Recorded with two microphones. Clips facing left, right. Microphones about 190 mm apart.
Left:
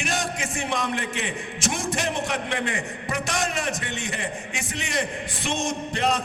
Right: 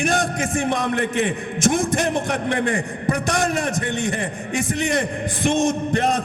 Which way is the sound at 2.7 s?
50° right (ahead or behind).